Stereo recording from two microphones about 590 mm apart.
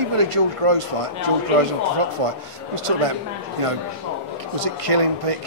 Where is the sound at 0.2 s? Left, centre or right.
Right.